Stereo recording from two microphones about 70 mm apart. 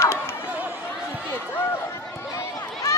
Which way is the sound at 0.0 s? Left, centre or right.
Left.